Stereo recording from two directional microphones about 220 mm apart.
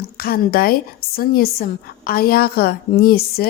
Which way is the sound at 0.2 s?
45° left (ahead or behind).